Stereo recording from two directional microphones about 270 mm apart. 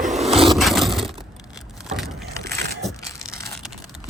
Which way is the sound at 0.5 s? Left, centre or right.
Centre.